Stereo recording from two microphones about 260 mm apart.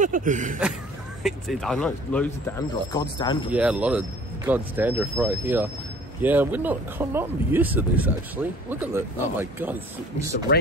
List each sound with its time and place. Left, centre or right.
0.0 s a sound: right
1.2 s speech: centre
3.4 s speech: centre